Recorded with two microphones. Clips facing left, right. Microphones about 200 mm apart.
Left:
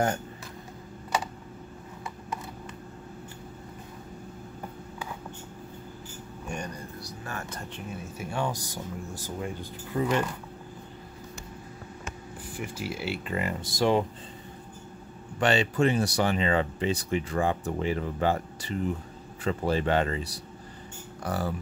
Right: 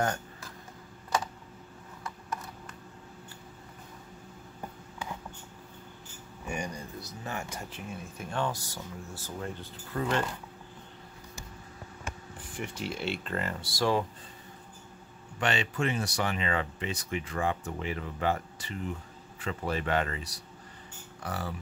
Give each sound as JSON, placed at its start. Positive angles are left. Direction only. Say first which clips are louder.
{"t": 6.4, "sound": "speech", "louder": "right 1 dB", "side_deg": -10}
{"t": 12.5, "sound": "speech", "louder": "left 1 dB", "side_deg": 5}
{"t": 15.3, "sound": "speech", "louder": "left 6 dB", "side_deg": 35}
{"t": 21.2, "sound": "speech", "louder": "left 6 dB", "side_deg": 40}